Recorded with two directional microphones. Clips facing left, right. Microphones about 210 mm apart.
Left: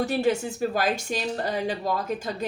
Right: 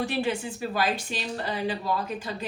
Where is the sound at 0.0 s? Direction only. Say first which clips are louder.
Left 4 dB; 45° left (ahead or behind).